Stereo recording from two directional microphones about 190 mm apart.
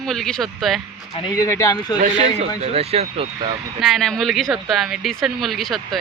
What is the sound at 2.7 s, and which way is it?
Speech, 35° right (ahead or behind).